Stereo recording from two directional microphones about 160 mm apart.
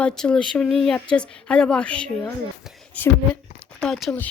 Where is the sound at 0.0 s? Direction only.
5° left (ahead or behind).